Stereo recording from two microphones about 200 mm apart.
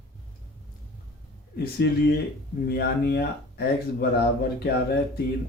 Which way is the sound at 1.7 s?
55° left (ahead or behind).